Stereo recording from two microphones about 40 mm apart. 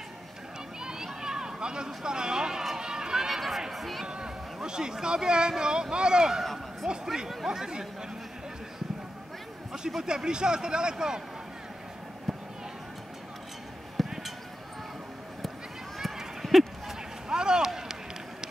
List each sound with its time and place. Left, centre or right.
0.7 s a sound: centre
2.0 s speech: centre
2.8 s run: centre
4.0 s speech: centre
6.4 s speech: centre
7.4 s speech: centre
9.7 s speech: centre
10.0 s speech: centre
14.0 s basketball bounce: centre
16.0 s a sound: centre
17.3 s a sound: centre
17.6 s run: centre